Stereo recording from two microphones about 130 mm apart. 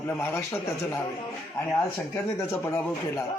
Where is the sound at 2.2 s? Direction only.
20° left (ahead or behind).